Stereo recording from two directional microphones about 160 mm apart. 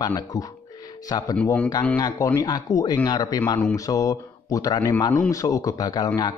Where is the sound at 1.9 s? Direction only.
20° left (ahead or behind).